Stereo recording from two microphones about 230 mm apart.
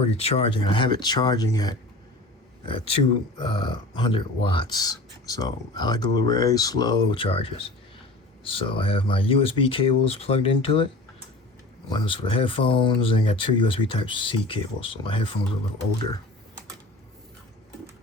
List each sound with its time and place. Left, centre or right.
0.0 s speech: left
11.9 s speech: left